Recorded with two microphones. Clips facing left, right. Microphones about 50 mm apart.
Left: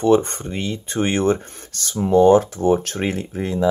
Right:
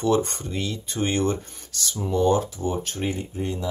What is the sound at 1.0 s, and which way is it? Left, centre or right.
Speech, left.